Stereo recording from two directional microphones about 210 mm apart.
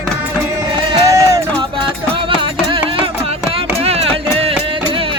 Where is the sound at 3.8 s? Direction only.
30° right (ahead or behind).